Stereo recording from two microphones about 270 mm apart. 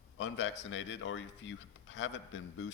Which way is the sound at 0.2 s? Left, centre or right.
Left.